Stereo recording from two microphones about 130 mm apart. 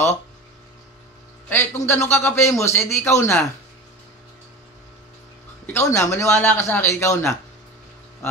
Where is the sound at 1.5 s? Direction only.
15° left (ahead or behind).